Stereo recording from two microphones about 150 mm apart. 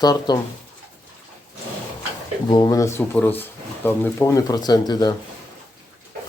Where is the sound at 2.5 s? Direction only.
25° left (ahead or behind).